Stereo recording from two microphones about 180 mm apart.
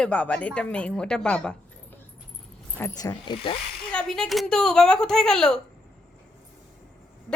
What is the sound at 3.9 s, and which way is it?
Speech, 5° left (ahead or behind).